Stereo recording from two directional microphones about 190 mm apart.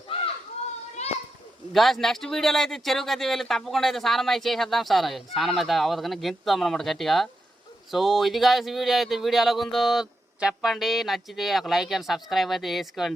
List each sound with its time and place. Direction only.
1.0 s children playing: 35° left (ahead or behind)
1.7 s speech: centre (ahead or behind)